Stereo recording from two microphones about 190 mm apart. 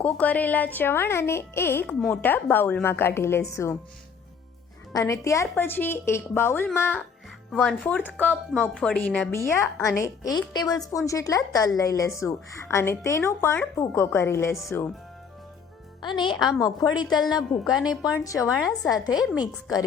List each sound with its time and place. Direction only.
0.0 s speech: 10° left (ahead or behind)
4.9 s a woman's voice: 15° left (ahead or behind)
16.0 s a woman's voice: 25° left (ahead or behind)
17.1 s a woman's voice: centre (ahead or behind)
18.2 s speech: 15° left (ahead or behind)
18.4 s a woman's voice: centre (ahead or behind)
19.4 s a woman's voice: 20° left (ahead or behind)